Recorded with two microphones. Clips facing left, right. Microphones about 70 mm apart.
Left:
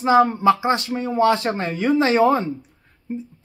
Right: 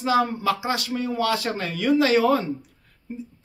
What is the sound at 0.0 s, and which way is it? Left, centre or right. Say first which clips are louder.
Speech: left 6 dB; left.